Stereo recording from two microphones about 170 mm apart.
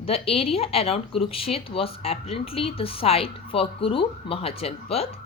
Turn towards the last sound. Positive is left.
turn(degrees=35)  # may be behind; listen again after turning